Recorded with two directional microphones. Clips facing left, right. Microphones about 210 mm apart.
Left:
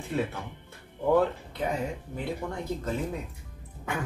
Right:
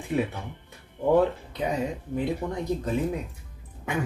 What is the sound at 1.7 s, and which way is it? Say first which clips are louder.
Speech: right 5 dB; 15° right (ahead or behind).